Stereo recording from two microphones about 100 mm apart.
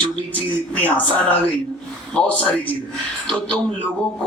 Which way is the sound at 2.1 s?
15° left (ahead or behind).